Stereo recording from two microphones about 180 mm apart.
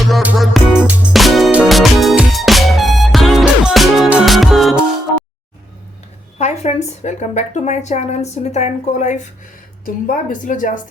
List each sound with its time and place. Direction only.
0.1 s music: 5° right (ahead or behind)
6.4 s a woman's voice: 35° left (ahead or behind)